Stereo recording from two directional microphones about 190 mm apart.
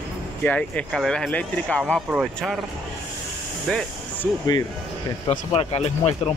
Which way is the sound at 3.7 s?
5° left (ahead or behind).